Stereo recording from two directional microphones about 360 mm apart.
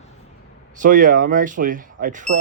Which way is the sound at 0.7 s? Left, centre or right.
Right.